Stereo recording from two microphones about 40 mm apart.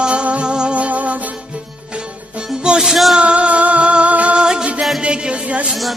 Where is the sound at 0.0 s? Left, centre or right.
Right.